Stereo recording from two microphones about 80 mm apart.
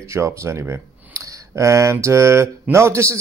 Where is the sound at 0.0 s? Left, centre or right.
Right.